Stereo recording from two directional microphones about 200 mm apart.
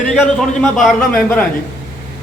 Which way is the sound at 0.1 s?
Centre (ahead or behind).